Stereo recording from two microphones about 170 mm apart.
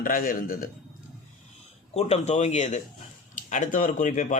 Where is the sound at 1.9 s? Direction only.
40° left (ahead or behind).